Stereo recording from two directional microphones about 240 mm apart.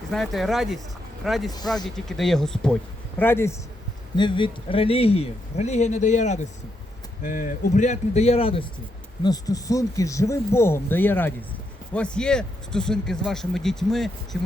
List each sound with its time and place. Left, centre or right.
0.1 s a man's voice: centre